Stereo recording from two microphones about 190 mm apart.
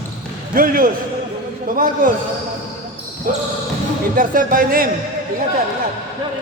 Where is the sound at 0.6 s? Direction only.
50° right (ahead or behind).